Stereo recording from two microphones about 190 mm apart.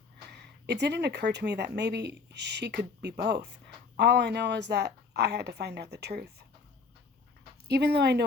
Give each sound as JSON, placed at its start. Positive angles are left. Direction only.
{"t": 0.3, "sound": "speech", "side_deg": -65}
{"t": 7.7, "sound": "speech", "side_deg": -60}